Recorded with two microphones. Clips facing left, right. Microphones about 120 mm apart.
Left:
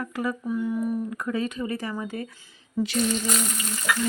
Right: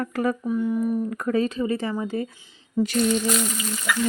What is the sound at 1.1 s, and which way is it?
Speech, 50° right (ahead or behind).